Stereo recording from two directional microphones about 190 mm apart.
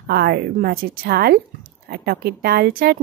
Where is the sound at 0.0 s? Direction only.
55° right (ahead or behind).